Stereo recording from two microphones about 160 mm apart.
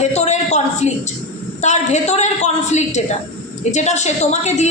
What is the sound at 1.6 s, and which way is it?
A woman's voice, 45° left (ahead or behind).